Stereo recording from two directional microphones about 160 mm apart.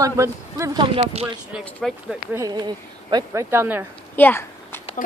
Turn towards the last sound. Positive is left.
turn(degrees=10)  # may be behind; listen again after turning